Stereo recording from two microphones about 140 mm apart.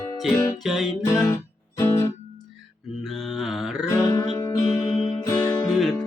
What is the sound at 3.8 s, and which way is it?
Music, 20° left (ahead or behind).